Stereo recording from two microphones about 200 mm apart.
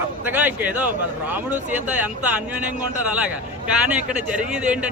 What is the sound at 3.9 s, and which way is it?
Speech, 5° right (ahead or behind).